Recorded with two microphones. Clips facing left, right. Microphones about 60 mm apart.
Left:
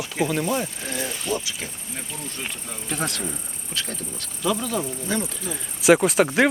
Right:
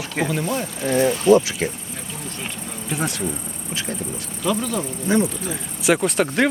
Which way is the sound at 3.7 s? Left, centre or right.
Centre.